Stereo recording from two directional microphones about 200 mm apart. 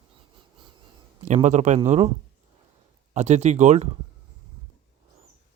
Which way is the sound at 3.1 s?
35° right (ahead or behind).